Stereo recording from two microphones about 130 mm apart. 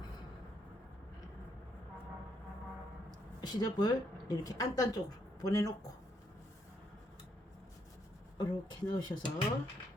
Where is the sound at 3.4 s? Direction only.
30° left (ahead or behind).